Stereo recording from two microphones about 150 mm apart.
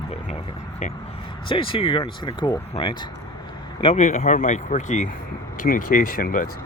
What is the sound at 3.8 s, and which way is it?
Speech, 40° left (ahead or behind).